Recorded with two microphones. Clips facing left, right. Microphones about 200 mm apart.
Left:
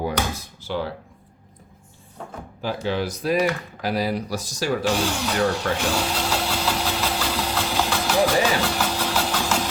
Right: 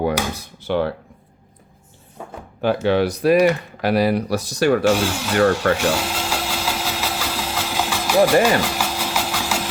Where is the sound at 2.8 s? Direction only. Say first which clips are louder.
Right 7 dB; 65° right (ahead or behind).